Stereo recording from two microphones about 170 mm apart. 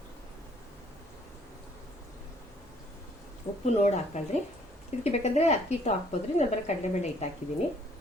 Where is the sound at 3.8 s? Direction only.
45° left (ahead or behind).